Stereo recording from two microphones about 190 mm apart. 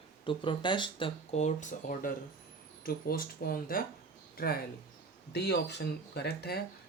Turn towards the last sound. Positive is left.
turn(degrees=55)  # may be behind; listen again after turning